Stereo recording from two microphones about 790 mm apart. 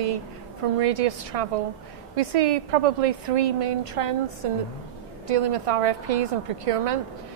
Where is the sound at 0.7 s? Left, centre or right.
Right.